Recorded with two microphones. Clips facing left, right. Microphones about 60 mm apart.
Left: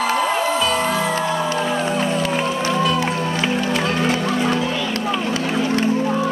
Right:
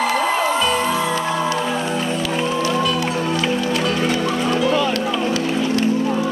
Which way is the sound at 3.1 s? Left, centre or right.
Centre.